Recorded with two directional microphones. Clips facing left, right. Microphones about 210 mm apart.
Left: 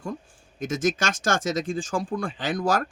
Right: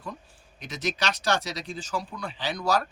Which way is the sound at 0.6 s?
45° left (ahead or behind).